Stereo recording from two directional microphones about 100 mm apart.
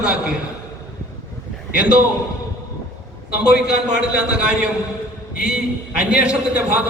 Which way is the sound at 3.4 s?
5° right (ahead or behind).